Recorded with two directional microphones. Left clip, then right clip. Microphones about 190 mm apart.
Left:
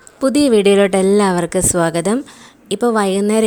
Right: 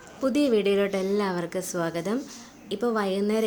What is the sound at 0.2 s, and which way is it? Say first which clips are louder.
A woman's voice: left 10 dB; 45° left (ahead or behind).